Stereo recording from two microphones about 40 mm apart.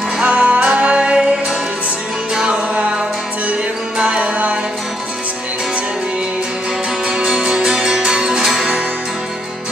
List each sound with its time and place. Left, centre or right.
0.2 s music: right
2.5 s music: right
4.0 s music: right
7.4 s music: centre